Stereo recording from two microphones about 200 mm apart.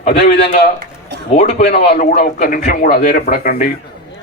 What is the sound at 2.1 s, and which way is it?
Speech, 50° left (ahead or behind).